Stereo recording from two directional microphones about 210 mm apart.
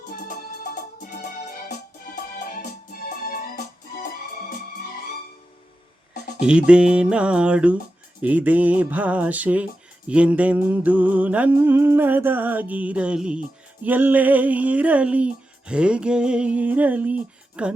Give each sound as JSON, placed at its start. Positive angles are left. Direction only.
{"t": 0.1, "sound": "music", "side_deg": 45}
{"t": 2.5, "sound": "music", "side_deg": 40}
{"t": 6.4, "sound": "music", "side_deg": -5}
{"t": 8.2, "sound": "a sound", "side_deg": -5}
{"t": 17.6, "sound": "music", "side_deg": -5}